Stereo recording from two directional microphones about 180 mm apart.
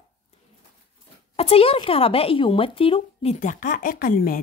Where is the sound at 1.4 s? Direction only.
30° left (ahead or behind).